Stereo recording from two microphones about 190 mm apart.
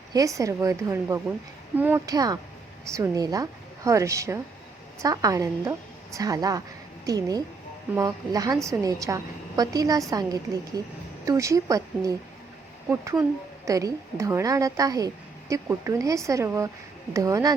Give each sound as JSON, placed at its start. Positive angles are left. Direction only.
{"t": 0.1, "sound": "a woman's voice", "side_deg": -15}